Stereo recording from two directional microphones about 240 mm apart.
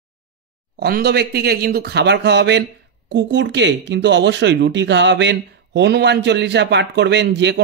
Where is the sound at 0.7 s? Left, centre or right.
Right.